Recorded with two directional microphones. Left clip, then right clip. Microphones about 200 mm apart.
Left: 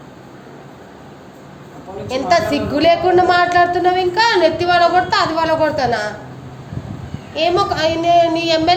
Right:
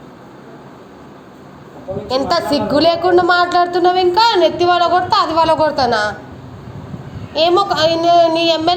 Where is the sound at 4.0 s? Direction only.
20° right (ahead or behind).